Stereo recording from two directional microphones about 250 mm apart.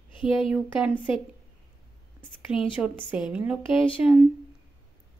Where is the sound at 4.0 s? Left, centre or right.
Centre.